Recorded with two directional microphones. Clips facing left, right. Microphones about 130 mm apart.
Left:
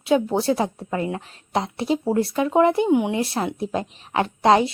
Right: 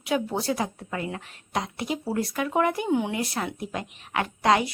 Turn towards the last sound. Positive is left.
turn(degrees=30)  # may be behind; listen again after turning